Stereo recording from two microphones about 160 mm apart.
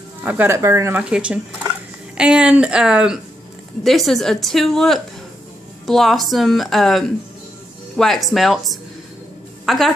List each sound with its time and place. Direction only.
0.2 s speech: 10° right (ahead or behind)
1.0 s a woman's voice: 5° right (ahead or behind)